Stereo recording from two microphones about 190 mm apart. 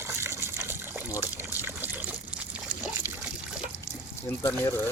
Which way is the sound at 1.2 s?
10° right (ahead or behind).